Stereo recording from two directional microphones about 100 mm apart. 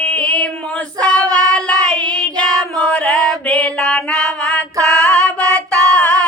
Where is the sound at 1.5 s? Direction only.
10° left (ahead or behind).